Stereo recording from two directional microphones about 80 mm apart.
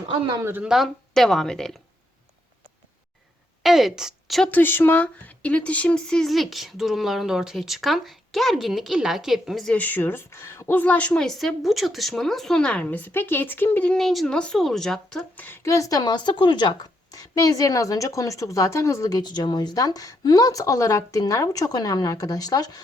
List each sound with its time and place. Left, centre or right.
0.6 s speech: centre
1.1 s speech: centre
3.6 s a woman's voice: centre
4.5 s speech: left; by 9.7 s centre
9.7 s a woman's voice: left
11.3 s a woman's voice: centre; by 13.8 s left
13.8 s a woman's voice: centre
15.6 s speech: left
17.1 s speech: left
19.1 s speech: left